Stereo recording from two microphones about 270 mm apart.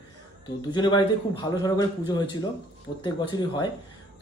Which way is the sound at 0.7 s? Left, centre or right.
Centre.